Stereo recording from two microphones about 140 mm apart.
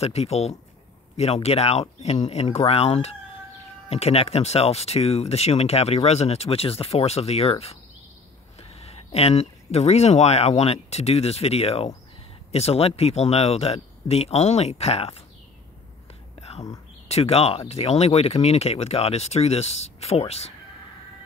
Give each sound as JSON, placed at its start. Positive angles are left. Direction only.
{"t": 0.0, "sound": "speech", "side_deg": 50}
{"t": 16.3, "sound": "whispering", "side_deg": 50}
{"t": 17.1, "sound": "speech", "side_deg": 45}